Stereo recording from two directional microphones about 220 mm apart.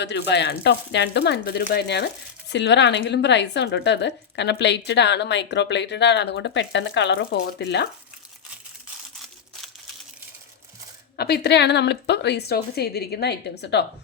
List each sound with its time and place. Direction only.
0.0 s speech: 50° left (ahead or behind)
11.2 s speech: 50° left (ahead or behind)